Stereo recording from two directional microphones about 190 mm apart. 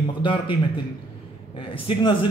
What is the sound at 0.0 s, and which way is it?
A man's voice, 25° left (ahead or behind).